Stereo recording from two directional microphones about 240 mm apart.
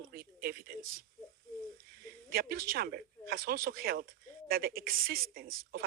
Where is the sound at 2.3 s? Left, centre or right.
Right.